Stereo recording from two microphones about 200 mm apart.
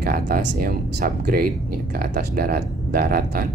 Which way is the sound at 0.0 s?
45° right (ahead or behind).